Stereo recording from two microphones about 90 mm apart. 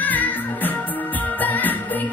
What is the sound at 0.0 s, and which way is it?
Music, 20° left (ahead or behind).